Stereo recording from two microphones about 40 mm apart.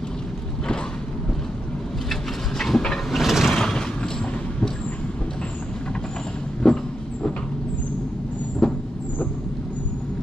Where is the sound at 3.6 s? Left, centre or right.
Centre.